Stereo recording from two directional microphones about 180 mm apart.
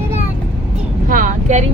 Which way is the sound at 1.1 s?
45° right (ahead or behind).